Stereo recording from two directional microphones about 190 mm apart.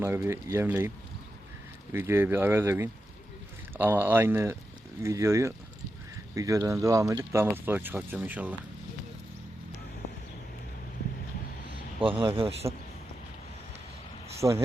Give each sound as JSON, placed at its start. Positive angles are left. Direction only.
{"t": 0.0, "sound": "speech", "side_deg": -15}
{"t": 12.0, "sound": "speech", "side_deg": -25}
{"t": 14.3, "sound": "speech", "side_deg": -15}